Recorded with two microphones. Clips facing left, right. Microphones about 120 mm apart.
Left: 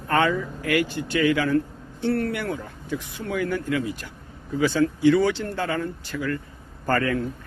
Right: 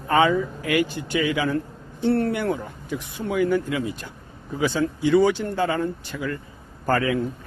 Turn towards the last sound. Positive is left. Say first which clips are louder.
# right 1 dB
turn(degrees=-5)  # may be behind; listen again after turning